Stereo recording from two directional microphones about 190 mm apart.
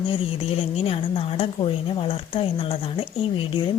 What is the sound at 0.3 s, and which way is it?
A woman's voice, 30° left (ahead or behind).